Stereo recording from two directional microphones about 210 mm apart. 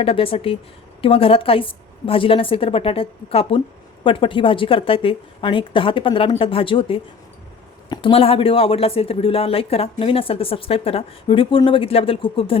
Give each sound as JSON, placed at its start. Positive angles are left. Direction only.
{"t": 0.0, "sound": "speech", "side_deg": 25}